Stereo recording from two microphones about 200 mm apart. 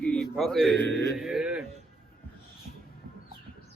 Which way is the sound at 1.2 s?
5° right (ahead or behind).